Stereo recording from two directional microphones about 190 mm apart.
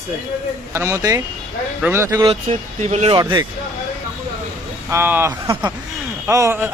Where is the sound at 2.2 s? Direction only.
30° right (ahead or behind).